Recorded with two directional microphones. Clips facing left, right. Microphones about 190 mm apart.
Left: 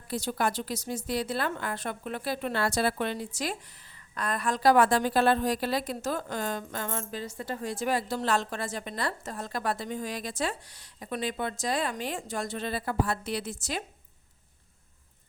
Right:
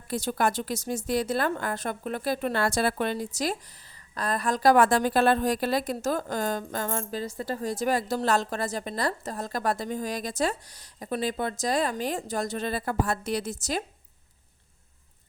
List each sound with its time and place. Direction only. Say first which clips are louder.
0.1 s a woman's voice: right 3 dB; 50° right (ahead or behind)